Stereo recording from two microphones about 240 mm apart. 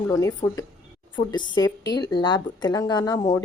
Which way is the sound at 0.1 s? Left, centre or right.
Centre.